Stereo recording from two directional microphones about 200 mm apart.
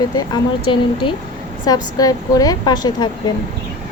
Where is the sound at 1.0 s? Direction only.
25° left (ahead or behind).